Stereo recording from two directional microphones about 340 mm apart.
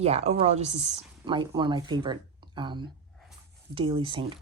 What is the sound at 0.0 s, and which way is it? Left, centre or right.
Speech, centre.